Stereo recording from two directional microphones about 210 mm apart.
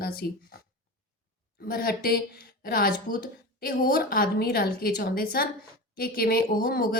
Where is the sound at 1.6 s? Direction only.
45° left (ahead or behind).